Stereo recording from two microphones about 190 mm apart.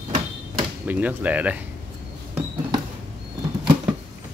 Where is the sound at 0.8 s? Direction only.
10° right (ahead or behind).